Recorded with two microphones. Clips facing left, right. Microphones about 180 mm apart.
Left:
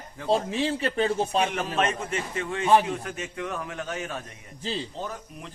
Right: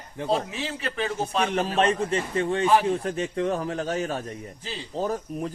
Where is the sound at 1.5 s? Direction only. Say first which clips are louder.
Right 4 dB; 35° right (ahead or behind).